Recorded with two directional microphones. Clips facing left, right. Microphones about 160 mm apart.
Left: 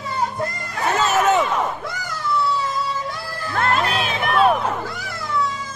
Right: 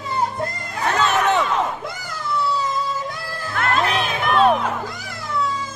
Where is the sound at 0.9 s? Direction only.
5° left (ahead or behind).